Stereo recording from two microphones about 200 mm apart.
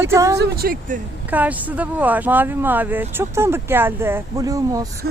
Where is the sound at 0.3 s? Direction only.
55° right (ahead or behind).